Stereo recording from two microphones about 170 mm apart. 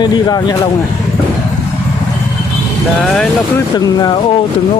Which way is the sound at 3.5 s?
20° left (ahead or behind).